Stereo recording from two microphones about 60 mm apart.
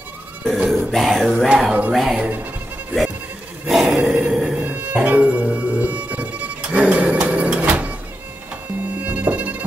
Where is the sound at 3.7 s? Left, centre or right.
Centre.